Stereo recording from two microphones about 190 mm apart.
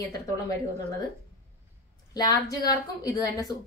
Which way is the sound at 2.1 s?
20° left (ahead or behind).